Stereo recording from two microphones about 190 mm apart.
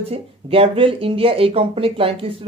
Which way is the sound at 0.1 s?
30° right (ahead or behind).